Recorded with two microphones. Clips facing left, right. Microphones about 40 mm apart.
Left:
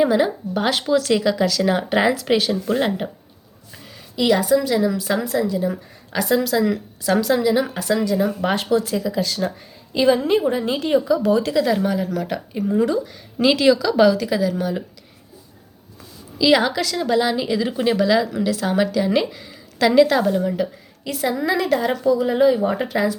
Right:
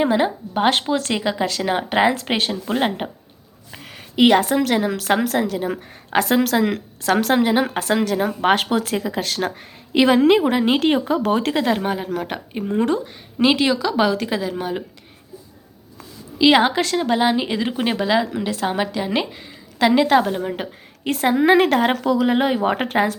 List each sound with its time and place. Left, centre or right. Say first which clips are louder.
0.0 s a woman's voice: left 1 dB; right
3.7 s a woman's voice: right 3 dB; right
13.4 s a woman's voice: left 2 dB; right
16.4 s a woman's voice: right 2 dB; right
21.0 s a woman's voice: right 5 dB; right